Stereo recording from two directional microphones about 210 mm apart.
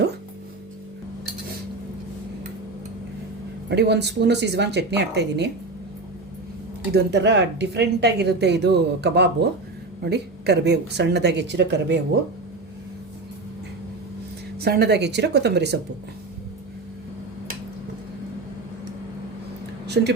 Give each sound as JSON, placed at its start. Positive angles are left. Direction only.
{"t": 3.7, "sound": "speech", "side_deg": -55}
{"t": 6.9, "sound": "speech", "side_deg": -55}
{"t": 14.6, "sound": "speech", "side_deg": -50}
{"t": 20.0, "sound": "speech", "side_deg": -50}